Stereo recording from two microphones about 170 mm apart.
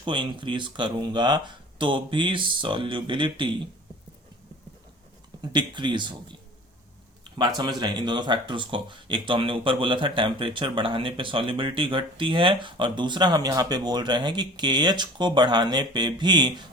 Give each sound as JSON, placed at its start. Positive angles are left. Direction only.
{"t": 0.0, "sound": "speech", "side_deg": -30}
{"t": 5.4, "sound": "speech", "side_deg": -25}
{"t": 7.3, "sound": "speech", "side_deg": -25}